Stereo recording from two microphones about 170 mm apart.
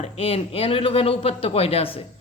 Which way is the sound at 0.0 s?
35° left (ahead or behind).